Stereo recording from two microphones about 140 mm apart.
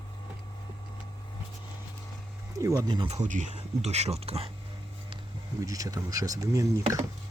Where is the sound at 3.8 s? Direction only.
50° right (ahead or behind).